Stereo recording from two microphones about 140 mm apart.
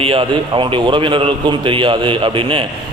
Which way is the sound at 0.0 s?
40° right (ahead or behind).